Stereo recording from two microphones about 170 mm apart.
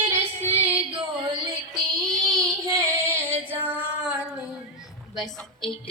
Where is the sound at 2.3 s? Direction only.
20° right (ahead or behind).